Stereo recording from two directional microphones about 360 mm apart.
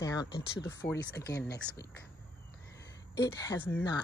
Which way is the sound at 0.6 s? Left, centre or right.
Centre.